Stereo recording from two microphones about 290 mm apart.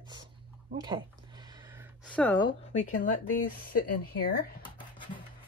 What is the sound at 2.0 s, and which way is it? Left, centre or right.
Speech, centre.